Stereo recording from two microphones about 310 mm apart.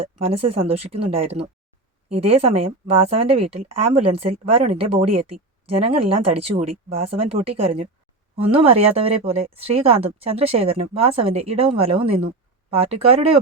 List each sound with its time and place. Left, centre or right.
0.2 s speech: centre